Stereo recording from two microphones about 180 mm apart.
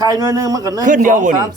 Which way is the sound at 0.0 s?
20° right (ahead or behind).